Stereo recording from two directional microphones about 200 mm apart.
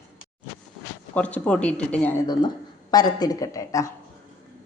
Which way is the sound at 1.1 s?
5° left (ahead or behind).